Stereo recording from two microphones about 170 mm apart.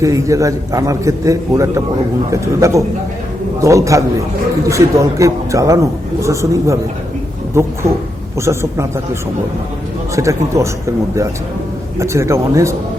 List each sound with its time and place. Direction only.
0.0 s a man's voice: 20° right (ahead or behind)
10.2 s a man's voice: 20° right (ahead or behind)